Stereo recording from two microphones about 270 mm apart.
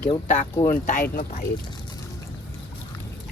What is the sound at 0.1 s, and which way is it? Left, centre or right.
Speech, left.